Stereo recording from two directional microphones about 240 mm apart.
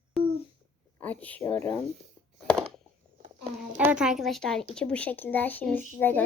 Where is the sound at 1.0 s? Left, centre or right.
Centre.